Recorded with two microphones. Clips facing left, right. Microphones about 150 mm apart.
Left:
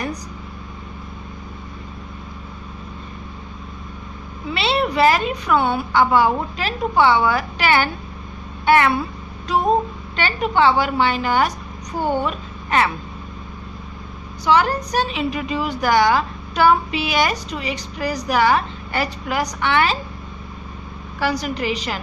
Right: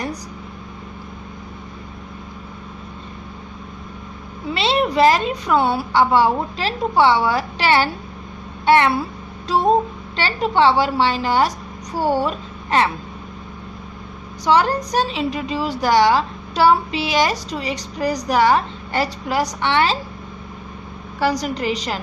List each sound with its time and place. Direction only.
4.6 s a woman's voice: 35° right (ahead or behind)
10.1 s a woman's voice: 35° right (ahead or behind)
12.0 s speech: 10° right (ahead or behind)
12.3 s a woman's voice: 30° right (ahead or behind)
14.4 s a woman's voice: 35° right (ahead or behind)
21.2 s a woman's voice: 35° right (ahead or behind)